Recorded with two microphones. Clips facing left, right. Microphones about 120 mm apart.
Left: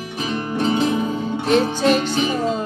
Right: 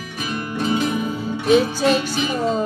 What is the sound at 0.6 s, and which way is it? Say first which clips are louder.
Music: left 2 dB; 25° left (ahead or behind).